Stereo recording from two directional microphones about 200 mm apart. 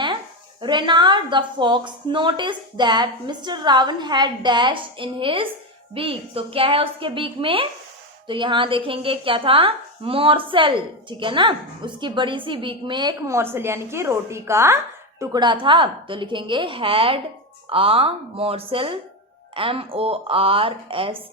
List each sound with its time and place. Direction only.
0.6 s a woman's voice: 25° right (ahead or behind)